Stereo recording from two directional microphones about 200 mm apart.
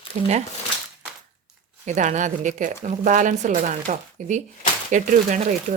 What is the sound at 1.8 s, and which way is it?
Speech, 35° right (ahead or behind).